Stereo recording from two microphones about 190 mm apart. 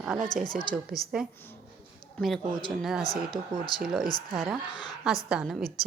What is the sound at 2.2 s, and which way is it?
Speech, 5° left (ahead or behind).